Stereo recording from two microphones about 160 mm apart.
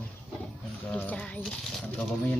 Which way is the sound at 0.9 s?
10° left (ahead or behind).